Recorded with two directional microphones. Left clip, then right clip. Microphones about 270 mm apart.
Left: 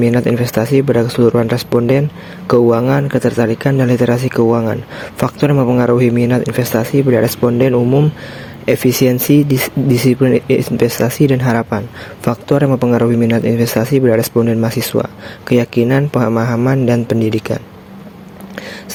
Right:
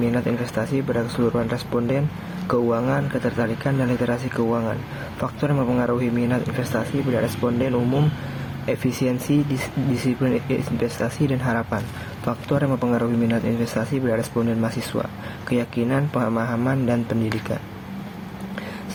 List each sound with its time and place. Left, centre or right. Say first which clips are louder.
0.0 s speech: left 10 dB; left